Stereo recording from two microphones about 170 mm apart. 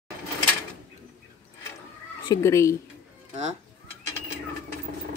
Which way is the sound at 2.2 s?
15° left (ahead or behind).